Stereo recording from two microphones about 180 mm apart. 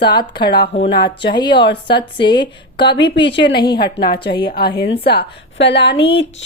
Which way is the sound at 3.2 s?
75° left (ahead or behind).